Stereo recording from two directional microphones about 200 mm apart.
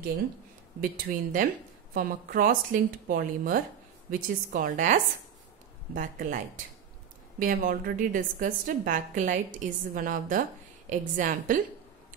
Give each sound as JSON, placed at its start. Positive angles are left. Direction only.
{"t": 0.7, "sound": "a woman's voice", "side_deg": -45}